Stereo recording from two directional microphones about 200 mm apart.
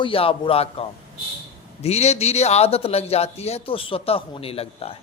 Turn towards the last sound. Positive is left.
turn(degrees=30)  # may be behind; listen again after turning